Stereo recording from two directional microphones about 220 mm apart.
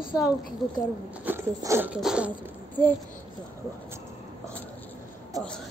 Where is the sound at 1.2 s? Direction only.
10° right (ahead or behind).